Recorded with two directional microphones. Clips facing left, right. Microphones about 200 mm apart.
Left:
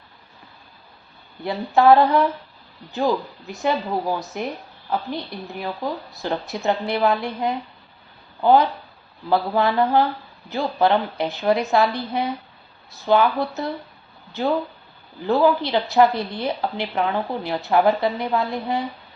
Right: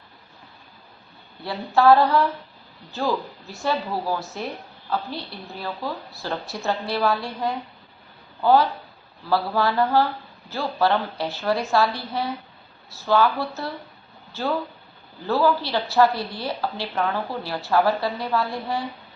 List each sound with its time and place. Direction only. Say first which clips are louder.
1.5 s a woman's voice: left 2 dB; 20° left (ahead or behind)